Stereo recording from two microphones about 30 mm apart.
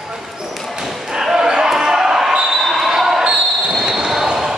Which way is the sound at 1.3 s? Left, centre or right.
Right.